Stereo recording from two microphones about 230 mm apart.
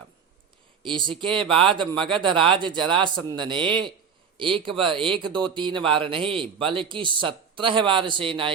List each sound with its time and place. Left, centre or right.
0.8 s speech: right